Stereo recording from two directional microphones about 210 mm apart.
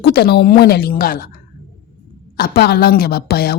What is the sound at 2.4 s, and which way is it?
A woman's voice, 45° left (ahead or behind).